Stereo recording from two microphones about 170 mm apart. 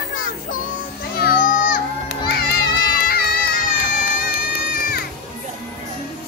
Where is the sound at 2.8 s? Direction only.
65° left (ahead or behind).